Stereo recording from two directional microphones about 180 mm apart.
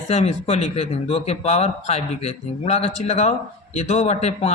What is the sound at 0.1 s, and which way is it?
Speech, 35° left (ahead or behind).